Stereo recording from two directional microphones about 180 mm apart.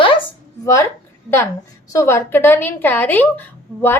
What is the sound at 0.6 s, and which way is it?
Speech, 15° left (ahead or behind).